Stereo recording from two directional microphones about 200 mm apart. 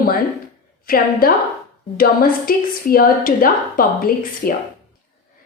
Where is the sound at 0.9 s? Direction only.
45° left (ahead or behind).